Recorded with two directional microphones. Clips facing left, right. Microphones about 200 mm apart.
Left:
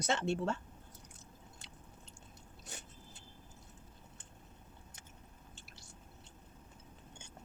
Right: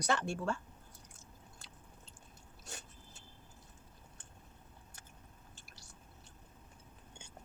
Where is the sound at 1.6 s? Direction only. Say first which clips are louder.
Left 1 dB; 20° left (ahead or behind).